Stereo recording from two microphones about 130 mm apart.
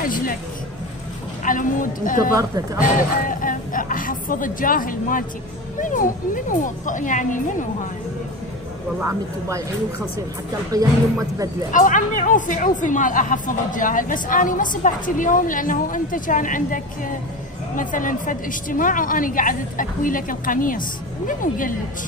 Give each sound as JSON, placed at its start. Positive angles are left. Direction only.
{"t": 0.0, "sound": "speech", "side_deg": 90}
{"t": 1.4, "sound": "a woman's voice", "side_deg": 90}
{"t": 2.3, "sound": "speech", "side_deg": -25}
{"t": 2.8, "sound": "a woman's voice", "side_deg": 90}
{"t": 11.7, "sound": "a woman's voice", "side_deg": 85}